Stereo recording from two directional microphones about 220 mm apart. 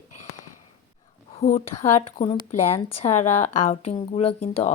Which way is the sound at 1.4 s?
30° left (ahead or behind).